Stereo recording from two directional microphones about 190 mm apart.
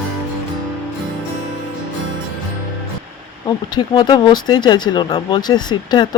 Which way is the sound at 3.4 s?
20° left (ahead or behind).